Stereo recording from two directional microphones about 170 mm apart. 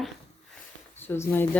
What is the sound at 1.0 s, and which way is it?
Speech, 10° left (ahead or behind).